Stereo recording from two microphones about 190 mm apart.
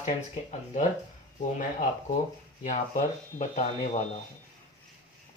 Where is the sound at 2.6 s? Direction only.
40° left (ahead or behind).